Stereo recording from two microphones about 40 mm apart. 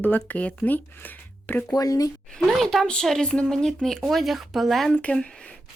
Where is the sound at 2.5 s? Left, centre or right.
Centre.